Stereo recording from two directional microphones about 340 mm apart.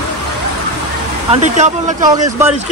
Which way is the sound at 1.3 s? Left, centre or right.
Right.